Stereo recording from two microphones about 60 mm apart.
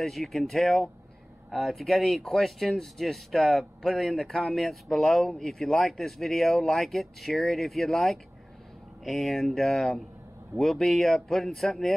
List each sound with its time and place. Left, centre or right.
0.0 s speech: centre